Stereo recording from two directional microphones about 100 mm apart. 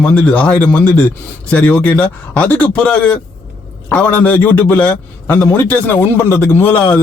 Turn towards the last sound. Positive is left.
turn(degrees=15)  # may be behind; listen again after turning